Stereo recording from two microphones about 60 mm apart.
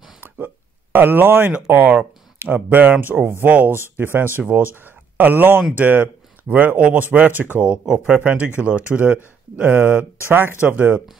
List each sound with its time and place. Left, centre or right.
0.9 s speech: right
7.6 s speech: centre